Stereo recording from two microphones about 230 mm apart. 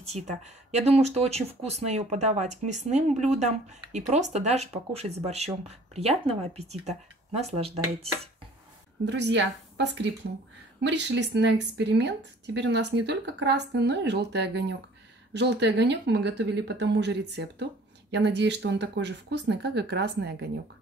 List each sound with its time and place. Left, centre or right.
0.0 s speech: right
9.0 s speech: right